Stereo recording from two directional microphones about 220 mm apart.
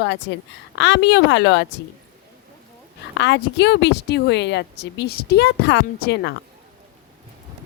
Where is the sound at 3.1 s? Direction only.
55° left (ahead or behind).